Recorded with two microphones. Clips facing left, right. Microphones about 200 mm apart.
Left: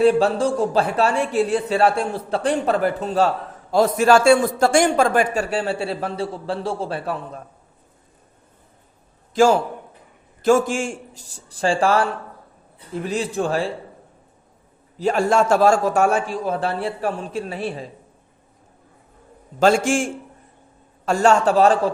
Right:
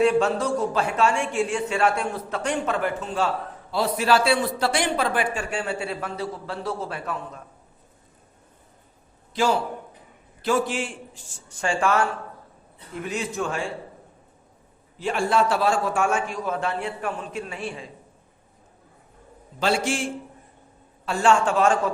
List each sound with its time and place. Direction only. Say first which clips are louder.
0.0 s speech: left 4 dB; 35° left (ahead or behind)
9.3 s a man's voice: left 7 dB; 45° left (ahead or behind)
14.9 s speech: left 5 dB; 40° left (ahead or behind)
19.5 s a man's voice: left 7 dB; 45° left (ahead or behind)